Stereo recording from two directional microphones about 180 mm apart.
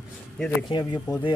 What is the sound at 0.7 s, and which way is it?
Speech, 25° left (ahead or behind).